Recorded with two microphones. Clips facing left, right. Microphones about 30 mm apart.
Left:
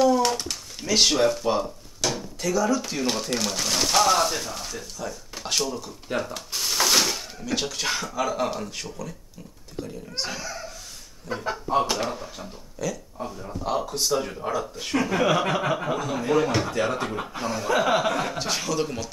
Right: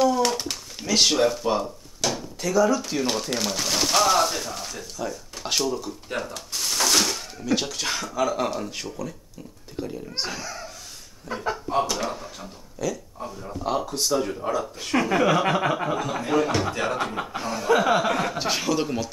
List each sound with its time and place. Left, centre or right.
0.0 s a sound: centre
0.8 s a man's voice: centre
10.3 s a sound: centre
11.2 s speech: centre
11.8 s speech: centre
12.1 s speech: centre
15.0 s chuckle: centre
18.1 s a man's voice: centre